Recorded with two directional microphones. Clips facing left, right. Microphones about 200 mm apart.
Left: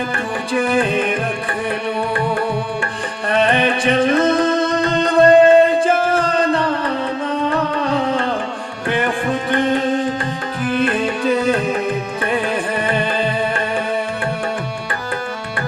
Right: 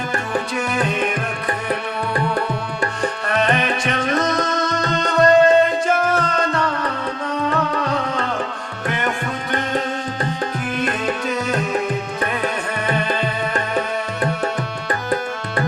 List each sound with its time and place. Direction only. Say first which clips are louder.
0.5 s music: left 10 dB; 30° left (ahead or behind)
3.2 s music: left 5 dB; 30° left (ahead or behind)
7.9 s music: left 4 dB; 30° left (ahead or behind)